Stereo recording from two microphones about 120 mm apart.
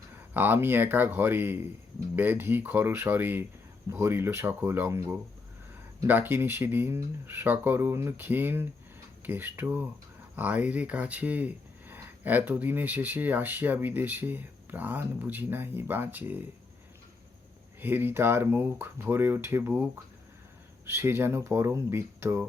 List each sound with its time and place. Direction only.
0.3 s speech: 15° right (ahead or behind)
17.7 s speech: 15° right (ahead or behind)